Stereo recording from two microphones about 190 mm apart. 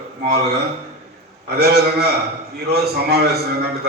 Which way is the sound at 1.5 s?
55° right (ahead or behind).